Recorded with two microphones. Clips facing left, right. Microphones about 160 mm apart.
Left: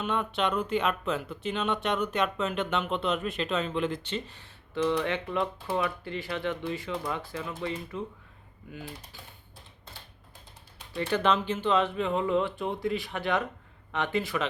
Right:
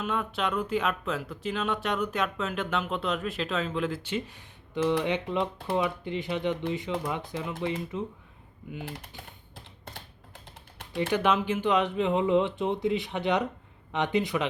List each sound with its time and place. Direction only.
0.0 s speech: centre (ahead or behind); by 8.1 s 20° right (ahead or behind)
11.1 s speech: 10° right (ahead or behind)